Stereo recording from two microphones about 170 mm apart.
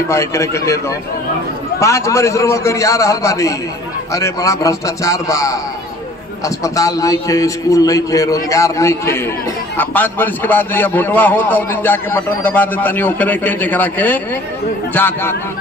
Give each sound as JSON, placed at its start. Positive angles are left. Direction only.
{"t": 0.1, "sound": "a man's voice", "side_deg": 15}
{"t": 1.8, "sound": "a man's voice", "side_deg": 15}